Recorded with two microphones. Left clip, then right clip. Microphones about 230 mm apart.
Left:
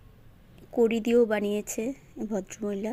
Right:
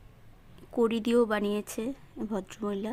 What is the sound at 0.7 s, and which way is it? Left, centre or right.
Speech, centre.